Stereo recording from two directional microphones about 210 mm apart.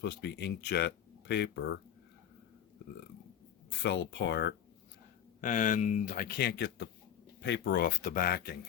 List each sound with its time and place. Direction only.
0.0 s speech: 55° left (ahead or behind)
3.8 s speech: 60° left (ahead or behind)
5.4 s speech: 40° left (ahead or behind)